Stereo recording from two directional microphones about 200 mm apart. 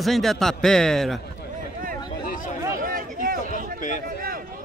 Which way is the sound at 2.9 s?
45° right (ahead or behind).